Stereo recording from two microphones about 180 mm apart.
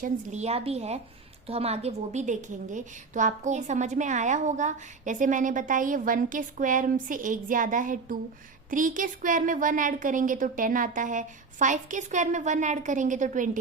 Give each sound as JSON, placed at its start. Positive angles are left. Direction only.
{"t": 0.0, "sound": "a woman's voice", "side_deg": -40}